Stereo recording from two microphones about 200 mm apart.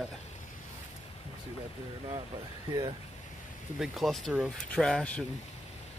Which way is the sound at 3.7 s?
Centre (ahead or behind).